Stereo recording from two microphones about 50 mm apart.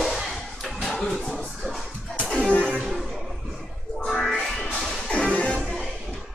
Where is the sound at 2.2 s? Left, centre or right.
Left.